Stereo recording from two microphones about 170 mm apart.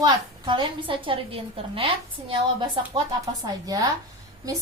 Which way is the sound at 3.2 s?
20° right (ahead or behind).